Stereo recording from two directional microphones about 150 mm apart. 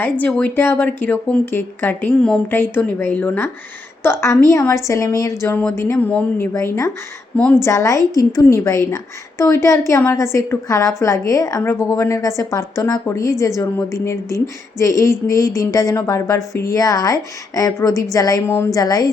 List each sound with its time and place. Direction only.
0.0 s speech: 10° left (ahead or behind); by 19.1 s 25° left (ahead or behind)